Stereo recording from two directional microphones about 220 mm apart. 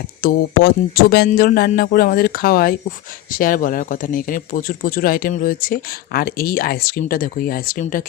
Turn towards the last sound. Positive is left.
turn(degrees=40)  # may be behind; listen again after turning